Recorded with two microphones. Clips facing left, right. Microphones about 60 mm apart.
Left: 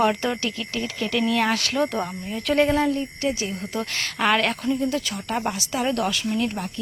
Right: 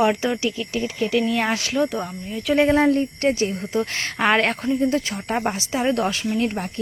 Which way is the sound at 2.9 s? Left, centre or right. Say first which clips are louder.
Right 5 dB; right.